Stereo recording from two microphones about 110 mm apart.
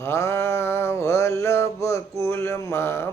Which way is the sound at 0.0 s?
25° left (ahead or behind).